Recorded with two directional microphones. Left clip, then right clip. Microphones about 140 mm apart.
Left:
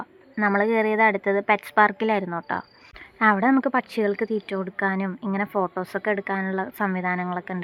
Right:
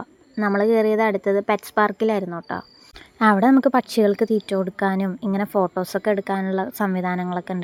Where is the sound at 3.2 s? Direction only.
55° right (ahead or behind).